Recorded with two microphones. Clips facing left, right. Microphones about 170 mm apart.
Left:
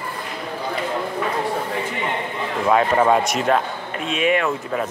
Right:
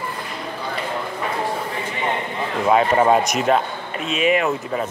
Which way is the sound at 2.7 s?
5° right (ahead or behind).